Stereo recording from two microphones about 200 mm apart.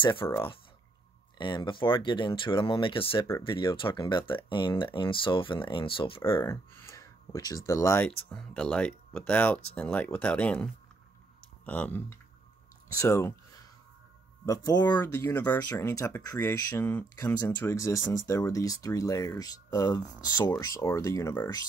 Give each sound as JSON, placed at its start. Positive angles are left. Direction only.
{"t": 0.0, "sound": "speech", "side_deg": 25}
{"t": 1.4, "sound": "speech", "side_deg": 25}
{"t": 6.3, "sound": "speech", "side_deg": 15}
{"t": 14.4, "sound": "speech", "side_deg": 20}